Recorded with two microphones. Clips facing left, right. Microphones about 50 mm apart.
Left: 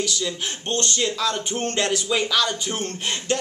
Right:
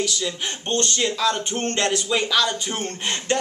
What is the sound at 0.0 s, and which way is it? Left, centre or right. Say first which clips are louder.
Speech: right 1 dB; centre.